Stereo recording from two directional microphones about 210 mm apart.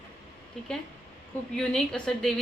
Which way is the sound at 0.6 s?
5° left (ahead or behind).